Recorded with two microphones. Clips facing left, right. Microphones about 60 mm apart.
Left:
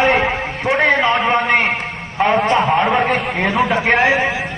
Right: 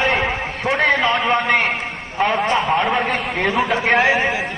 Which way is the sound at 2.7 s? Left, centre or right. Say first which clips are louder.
Left 3 dB; centre.